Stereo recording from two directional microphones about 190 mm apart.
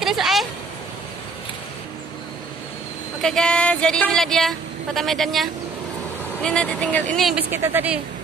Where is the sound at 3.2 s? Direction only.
5° left (ahead or behind).